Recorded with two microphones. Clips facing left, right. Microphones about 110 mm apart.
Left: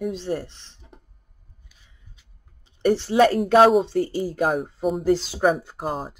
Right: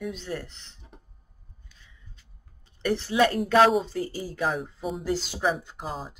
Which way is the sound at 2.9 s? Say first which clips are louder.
Left 6 dB; 35° left (ahead or behind).